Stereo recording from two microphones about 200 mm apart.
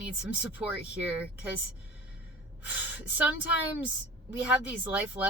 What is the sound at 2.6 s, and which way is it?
Speech, 10° right (ahead or behind).